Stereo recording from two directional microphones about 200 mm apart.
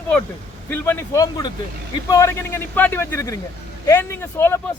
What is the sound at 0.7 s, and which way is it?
Speech, 10° left (ahead or behind).